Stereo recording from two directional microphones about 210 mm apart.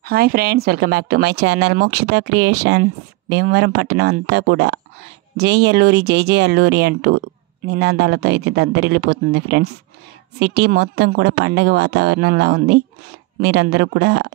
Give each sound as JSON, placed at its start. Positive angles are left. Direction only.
{"t": 0.0, "sound": "speech", "side_deg": -45}